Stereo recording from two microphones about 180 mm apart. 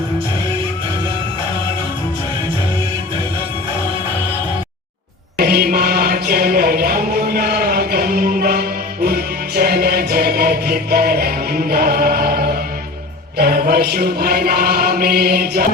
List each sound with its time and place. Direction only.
5.4 s chant: 60° right (ahead or behind)
9.0 s music: 60° right (ahead or behind)
13.3 s chant: 55° right (ahead or behind)